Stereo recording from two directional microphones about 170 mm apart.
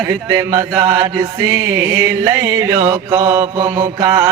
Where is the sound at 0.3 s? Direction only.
20° right (ahead or behind).